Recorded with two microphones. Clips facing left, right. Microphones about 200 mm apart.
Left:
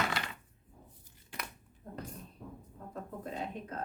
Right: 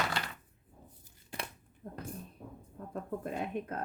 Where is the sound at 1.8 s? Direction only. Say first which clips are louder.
Right 1 dB; 50° right (ahead or behind).